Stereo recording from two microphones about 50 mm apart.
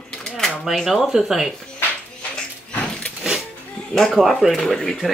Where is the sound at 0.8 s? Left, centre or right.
Centre.